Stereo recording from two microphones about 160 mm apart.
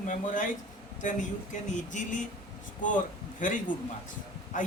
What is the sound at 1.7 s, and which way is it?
Speech, 50° left (ahead or behind).